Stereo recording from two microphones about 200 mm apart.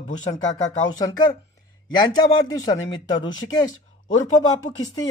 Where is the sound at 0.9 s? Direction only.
20° left (ahead or behind).